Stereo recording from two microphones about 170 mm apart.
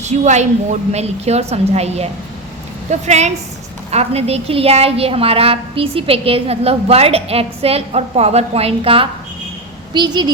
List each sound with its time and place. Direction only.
0.0 s a woman's voice: 40° right (ahead or behind)
3.1 s a woman's voice: 40° right (ahead or behind); by 10.3 s 25° right (ahead or behind)